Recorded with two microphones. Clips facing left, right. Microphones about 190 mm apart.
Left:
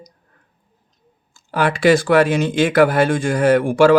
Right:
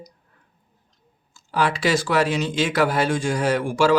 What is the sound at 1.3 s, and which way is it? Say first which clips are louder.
Speech: left 3 dB; 55° left (ahead or behind).